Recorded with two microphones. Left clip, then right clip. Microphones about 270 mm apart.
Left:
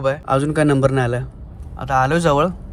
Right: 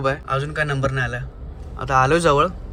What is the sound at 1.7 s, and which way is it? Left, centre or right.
Speech, centre.